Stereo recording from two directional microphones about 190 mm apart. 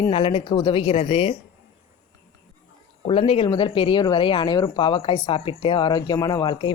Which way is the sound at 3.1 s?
30° left (ahead or behind).